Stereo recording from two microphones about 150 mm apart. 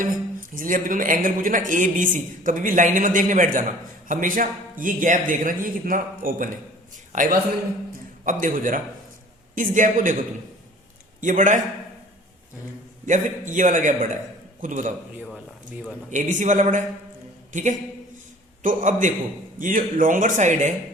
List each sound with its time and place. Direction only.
0.0 s a man's voice: 65° right (ahead or behind)
11.2 s speech: 60° right (ahead or behind)
13.1 s speech: 55° right (ahead or behind)
16.0 s a woman's voice: 55° right (ahead or behind)